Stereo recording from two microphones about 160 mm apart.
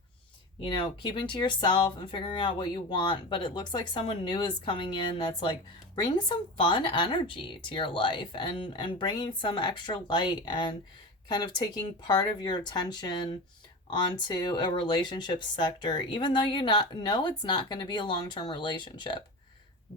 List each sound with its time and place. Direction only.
0.6 s speech: 30° left (ahead or behind)